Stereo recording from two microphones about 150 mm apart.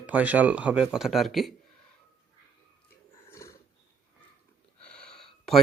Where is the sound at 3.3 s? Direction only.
20° left (ahead or behind).